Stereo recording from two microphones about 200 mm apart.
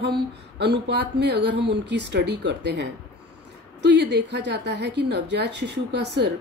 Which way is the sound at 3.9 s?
60° right (ahead or behind).